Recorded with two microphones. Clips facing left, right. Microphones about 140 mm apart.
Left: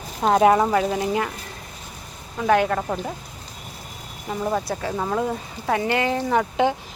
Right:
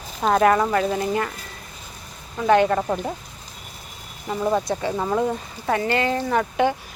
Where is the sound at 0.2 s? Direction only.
15° left (ahead or behind).